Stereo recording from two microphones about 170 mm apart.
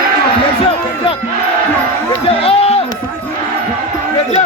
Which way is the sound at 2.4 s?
35° left (ahead or behind).